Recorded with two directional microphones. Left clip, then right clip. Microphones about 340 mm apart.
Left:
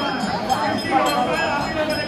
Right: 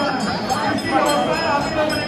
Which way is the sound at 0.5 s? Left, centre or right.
Left.